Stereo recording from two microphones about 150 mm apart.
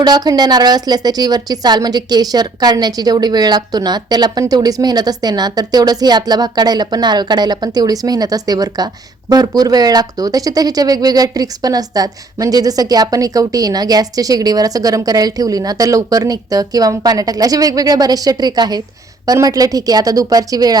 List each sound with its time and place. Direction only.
0.0 s speech: 25° right (ahead or behind)